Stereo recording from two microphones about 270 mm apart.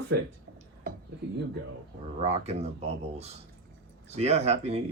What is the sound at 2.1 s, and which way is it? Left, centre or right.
Speech, right.